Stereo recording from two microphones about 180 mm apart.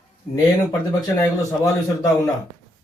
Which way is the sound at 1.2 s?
20° left (ahead or behind).